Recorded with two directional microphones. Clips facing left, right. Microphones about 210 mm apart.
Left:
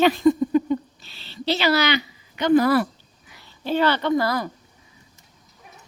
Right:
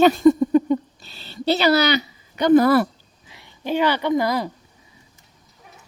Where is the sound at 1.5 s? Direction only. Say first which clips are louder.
Right 3 dB; 40° right (ahead or behind).